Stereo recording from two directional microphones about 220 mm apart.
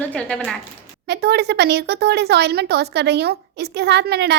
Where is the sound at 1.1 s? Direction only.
45° right (ahead or behind).